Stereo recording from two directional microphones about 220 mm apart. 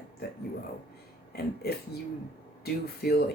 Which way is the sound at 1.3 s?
45° left (ahead or behind).